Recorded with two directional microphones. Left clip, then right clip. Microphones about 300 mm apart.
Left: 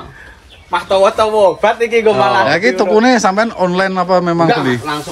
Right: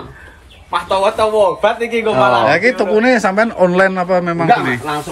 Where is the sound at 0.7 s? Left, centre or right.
Left.